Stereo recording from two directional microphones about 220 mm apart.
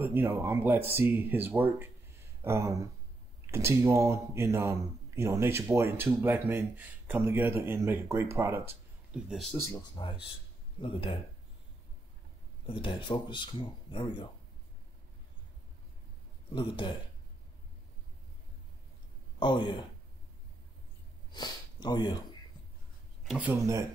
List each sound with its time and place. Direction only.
0.0 s speech: 10° right (ahead or behind)
9.3 s speech: centre (ahead or behind)
9.6 s speech: 15° left (ahead or behind)
12.6 s speech: 20° left (ahead or behind)
16.5 s speech: 20° left (ahead or behind)
19.4 s speech: 20° left (ahead or behind)
21.3 s speech: 20° left (ahead or behind)
23.2 s speech: 5° right (ahead or behind)